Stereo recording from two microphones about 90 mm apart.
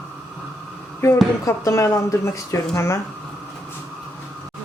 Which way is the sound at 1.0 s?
30° left (ahead or behind).